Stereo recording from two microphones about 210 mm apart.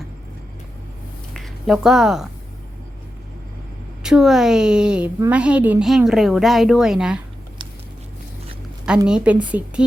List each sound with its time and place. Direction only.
1.3 s speech: centre (ahead or behind)
4.0 s a woman's voice: centre (ahead or behind)
9.0 s speech: 5° right (ahead or behind)